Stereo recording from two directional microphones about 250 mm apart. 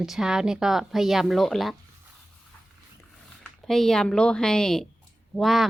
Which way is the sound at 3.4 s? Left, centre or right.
Centre.